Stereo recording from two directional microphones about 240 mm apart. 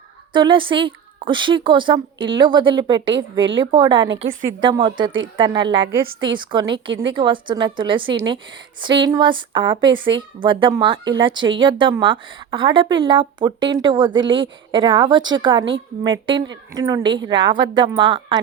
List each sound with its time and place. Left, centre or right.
0.3 s a woman's voice: centre
3.2 s a woman's voice: right
3.5 s a woman's voice: right
4.2 s a woman's voice: right
4.6 s a woman's voice: centre
5.8 s a woman's voice: right
6.2 s a woman's voice: centre